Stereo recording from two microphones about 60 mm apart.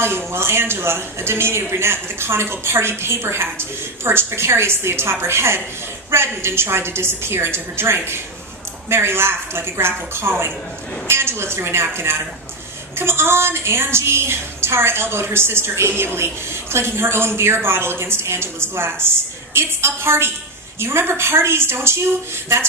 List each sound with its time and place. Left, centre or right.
0.3 s a woman's voice: right